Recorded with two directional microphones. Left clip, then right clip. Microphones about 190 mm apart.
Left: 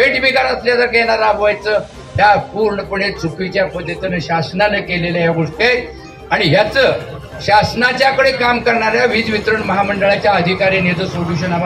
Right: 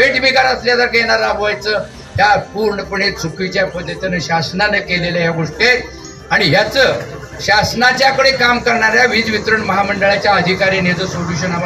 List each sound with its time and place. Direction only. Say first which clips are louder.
0.0 s a man's voice: right 1 dB; 50° left (ahead or behind)